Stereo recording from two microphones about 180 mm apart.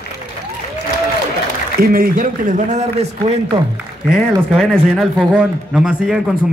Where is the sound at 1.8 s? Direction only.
55° right (ahead or behind).